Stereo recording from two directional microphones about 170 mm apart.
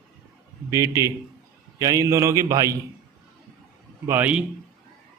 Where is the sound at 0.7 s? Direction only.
20° right (ahead or behind).